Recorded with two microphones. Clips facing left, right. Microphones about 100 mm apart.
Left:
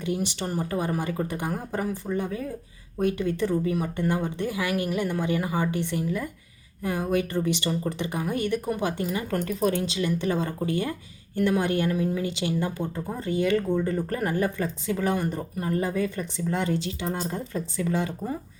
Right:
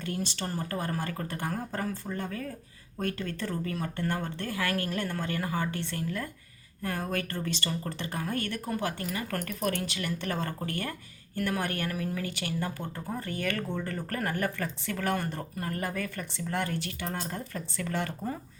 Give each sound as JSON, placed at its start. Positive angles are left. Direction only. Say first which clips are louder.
{"t": 0.0, "sound": "a woman's voice", "louder": "left 5 dB", "side_deg": 15}